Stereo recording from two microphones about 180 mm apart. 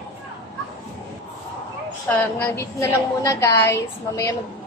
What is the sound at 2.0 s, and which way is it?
A woman's voice, 10° left (ahead or behind).